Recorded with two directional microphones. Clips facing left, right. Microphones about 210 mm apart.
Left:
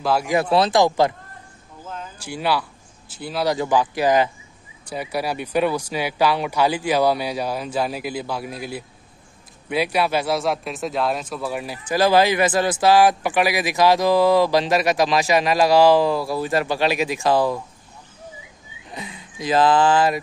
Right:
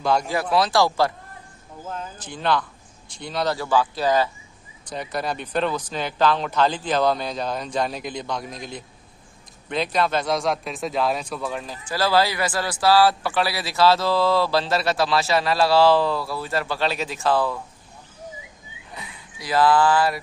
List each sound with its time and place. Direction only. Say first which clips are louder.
0.0 s speech: even; 5° left (ahead or behind)
0.3 s speech: left 3 dB; 25° left (ahead or behind)
2.1 s speech: left 1 dB; 10° left (ahead or behind)
3.5 s speech: left 2 dB; 15° left (ahead or behind)
18.9 s a sound: left 5 dB; 20° left (ahead or behind)
19.4 s speech: left 2 dB; 20° left (ahead or behind)